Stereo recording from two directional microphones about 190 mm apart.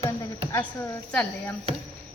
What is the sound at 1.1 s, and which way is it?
Speech, 5° left (ahead or behind).